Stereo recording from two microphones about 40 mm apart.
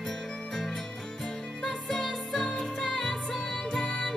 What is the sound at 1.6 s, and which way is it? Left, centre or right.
Music, centre.